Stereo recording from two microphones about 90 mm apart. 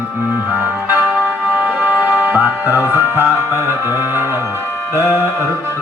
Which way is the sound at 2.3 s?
20° right (ahead or behind).